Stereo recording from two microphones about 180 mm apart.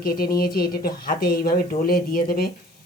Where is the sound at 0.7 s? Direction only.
55° left (ahead or behind).